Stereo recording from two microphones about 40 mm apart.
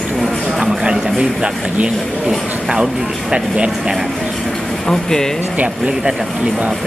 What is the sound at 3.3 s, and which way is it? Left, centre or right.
Speech, right.